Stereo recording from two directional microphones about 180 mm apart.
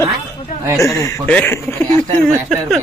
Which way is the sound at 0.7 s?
20° left (ahead or behind).